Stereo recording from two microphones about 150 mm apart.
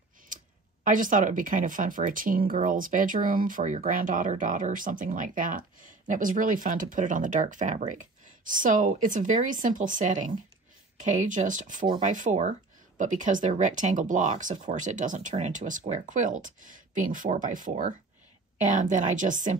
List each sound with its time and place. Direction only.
0.8 s speech: 60° right (ahead or behind)
11.7 s speech: 30° right (ahead or behind)
12.0 s speech: 60° right (ahead or behind)